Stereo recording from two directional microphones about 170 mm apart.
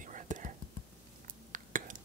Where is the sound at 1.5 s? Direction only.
50° right (ahead or behind).